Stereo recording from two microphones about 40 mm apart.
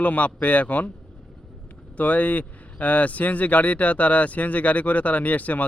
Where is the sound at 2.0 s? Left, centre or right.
Left.